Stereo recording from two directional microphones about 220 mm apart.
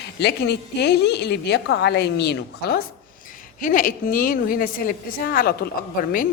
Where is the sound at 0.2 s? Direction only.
50° left (ahead or behind).